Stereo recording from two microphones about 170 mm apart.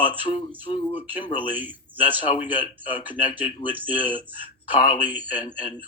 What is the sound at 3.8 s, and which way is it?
Speech, 10° right (ahead or behind).